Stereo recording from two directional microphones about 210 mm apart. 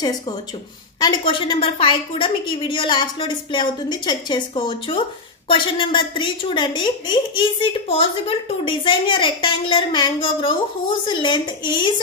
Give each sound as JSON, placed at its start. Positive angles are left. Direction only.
{"t": 0.9, "sound": "a woman's voice", "side_deg": 20}